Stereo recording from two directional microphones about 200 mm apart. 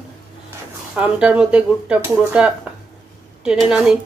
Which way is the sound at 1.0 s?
5° right (ahead or behind).